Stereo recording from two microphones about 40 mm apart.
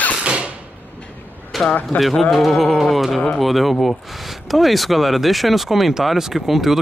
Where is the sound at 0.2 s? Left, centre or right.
Right.